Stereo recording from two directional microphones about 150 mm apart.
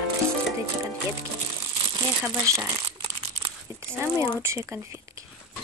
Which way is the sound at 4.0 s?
20° right (ahead or behind).